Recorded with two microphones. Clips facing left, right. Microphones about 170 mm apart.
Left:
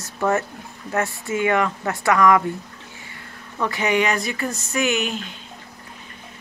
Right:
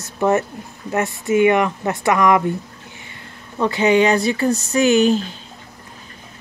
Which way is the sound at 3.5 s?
25° right (ahead or behind).